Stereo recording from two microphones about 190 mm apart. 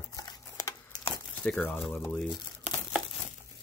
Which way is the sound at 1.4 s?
10° left (ahead or behind).